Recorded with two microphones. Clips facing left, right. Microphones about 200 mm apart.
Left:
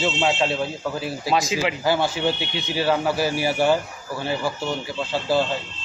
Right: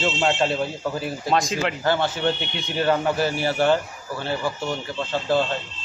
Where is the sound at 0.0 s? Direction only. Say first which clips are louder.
Even; centre (ahead or behind).